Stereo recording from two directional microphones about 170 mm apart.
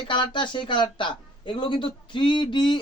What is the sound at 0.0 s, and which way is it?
Speech, 30° left (ahead or behind).